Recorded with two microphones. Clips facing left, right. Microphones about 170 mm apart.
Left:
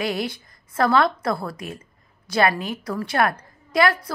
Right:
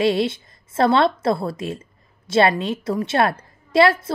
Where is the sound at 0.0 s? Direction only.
25° right (ahead or behind).